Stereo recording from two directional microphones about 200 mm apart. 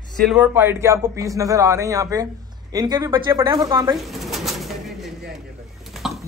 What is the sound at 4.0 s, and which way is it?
Pigeon, centre (ahead or behind).